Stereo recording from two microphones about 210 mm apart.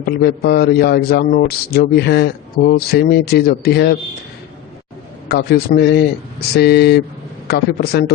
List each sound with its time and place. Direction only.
0.0 s a man's voice: 50° left (ahead or behind)
5.3 s a man's voice: 50° left (ahead or behind)